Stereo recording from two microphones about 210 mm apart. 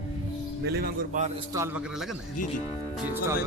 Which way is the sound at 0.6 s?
50° right (ahead or behind).